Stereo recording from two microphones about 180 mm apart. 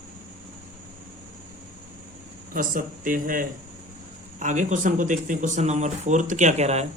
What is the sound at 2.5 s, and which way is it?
Speech, 50° right (ahead or behind).